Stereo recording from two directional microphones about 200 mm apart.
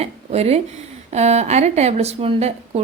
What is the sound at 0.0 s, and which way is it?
A woman's voice, 30° right (ahead or behind).